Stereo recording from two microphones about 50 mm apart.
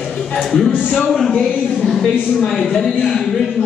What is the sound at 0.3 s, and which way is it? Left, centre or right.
Speech, centre.